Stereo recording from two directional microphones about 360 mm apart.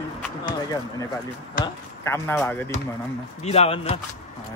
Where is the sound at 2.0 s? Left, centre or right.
Centre.